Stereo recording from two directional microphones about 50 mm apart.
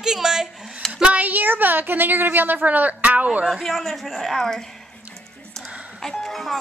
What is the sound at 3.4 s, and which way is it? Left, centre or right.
Speech, centre.